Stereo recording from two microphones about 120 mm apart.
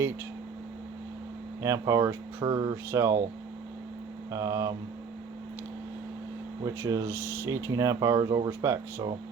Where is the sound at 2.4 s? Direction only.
35° right (ahead or behind).